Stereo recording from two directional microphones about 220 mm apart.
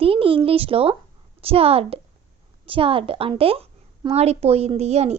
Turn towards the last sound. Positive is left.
turn(degrees=-30)  # may be behind; listen again after turning